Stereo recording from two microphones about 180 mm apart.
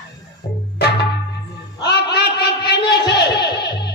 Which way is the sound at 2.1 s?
65° left (ahead or behind).